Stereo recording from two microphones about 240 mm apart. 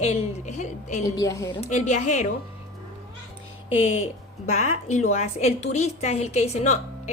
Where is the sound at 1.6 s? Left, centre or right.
Left.